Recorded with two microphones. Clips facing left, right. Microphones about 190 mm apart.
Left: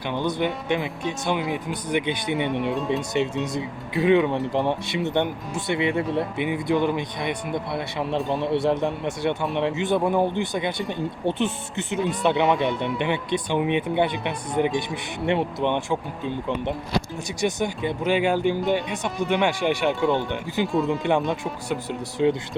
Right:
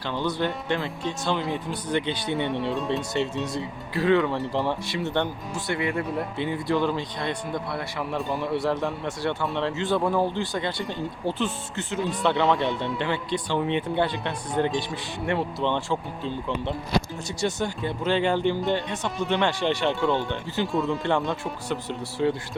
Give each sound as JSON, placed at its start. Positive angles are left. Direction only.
{"t": 0.1, "sound": "speech", "side_deg": 15}